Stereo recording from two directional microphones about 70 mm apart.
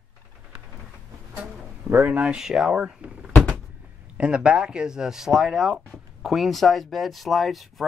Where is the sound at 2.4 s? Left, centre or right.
Centre.